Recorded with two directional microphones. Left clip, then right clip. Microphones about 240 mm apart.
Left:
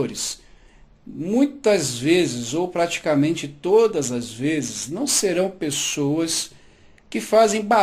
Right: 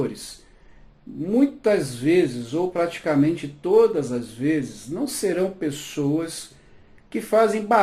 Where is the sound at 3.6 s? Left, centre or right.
Left.